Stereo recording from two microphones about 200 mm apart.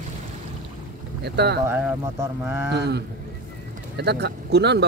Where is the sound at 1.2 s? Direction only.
55° right (ahead or behind).